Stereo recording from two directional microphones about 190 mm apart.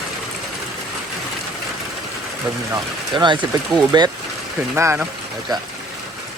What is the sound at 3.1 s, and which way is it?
Speech, 25° right (ahead or behind).